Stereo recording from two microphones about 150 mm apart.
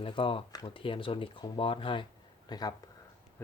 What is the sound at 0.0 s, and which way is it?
Speech, 35° left (ahead or behind).